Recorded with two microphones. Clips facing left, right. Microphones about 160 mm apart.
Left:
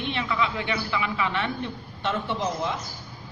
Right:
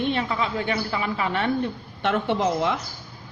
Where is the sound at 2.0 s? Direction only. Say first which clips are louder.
Right 5 dB; 60° right (ahead or behind).